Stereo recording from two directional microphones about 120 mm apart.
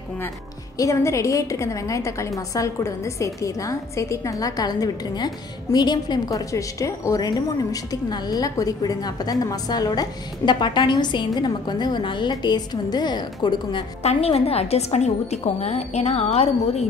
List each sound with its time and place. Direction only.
0.7 s a woman's voice: 25° left (ahead or behind)
14.0 s a woman's voice: 55° left (ahead or behind)